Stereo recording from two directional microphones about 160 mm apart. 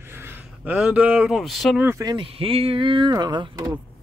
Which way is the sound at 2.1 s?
35° right (ahead or behind).